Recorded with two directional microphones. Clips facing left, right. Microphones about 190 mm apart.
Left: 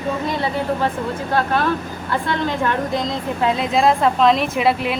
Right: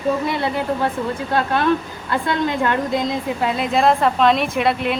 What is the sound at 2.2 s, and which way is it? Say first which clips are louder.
Speech: right 2 dB; 15° right (ahead or behind).